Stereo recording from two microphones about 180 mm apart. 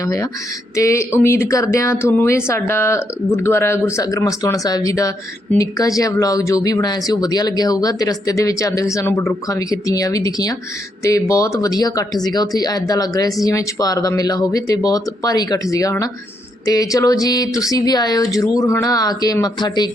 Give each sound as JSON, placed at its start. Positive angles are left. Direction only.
{"t": 0.0, "sound": "speech", "side_deg": 20}